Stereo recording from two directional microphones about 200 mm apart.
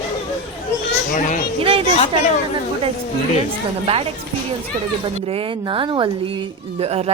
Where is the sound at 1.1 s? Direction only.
40° left (ahead or behind).